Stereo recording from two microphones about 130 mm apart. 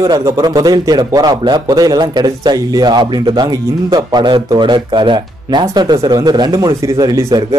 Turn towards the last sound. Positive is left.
turn(degrees=-30)  # may be behind; listen again after turning